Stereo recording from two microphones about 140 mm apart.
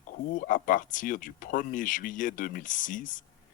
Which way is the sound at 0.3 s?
75° left (ahead or behind).